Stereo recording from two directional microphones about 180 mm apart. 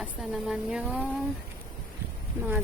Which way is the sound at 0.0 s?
5° right (ahead or behind).